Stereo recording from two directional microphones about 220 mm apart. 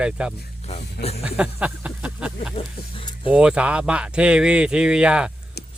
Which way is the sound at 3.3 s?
5° right (ahead or behind).